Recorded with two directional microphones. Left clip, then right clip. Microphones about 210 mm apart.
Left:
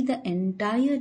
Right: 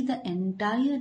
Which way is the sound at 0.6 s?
15° left (ahead or behind).